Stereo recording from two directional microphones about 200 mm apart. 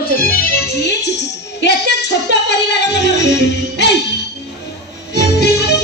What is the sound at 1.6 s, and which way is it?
Music, 60° left (ahead or behind).